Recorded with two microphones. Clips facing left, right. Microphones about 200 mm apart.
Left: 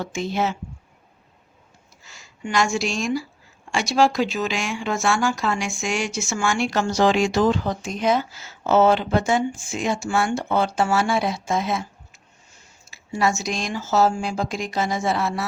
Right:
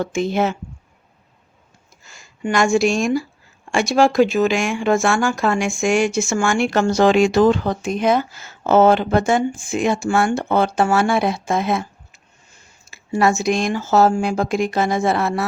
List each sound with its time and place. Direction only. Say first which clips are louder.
0.0 s speech: right 5 dB; 55° right (ahead or behind)
2.0 s speech: right 7 dB; 50° right (ahead or behind)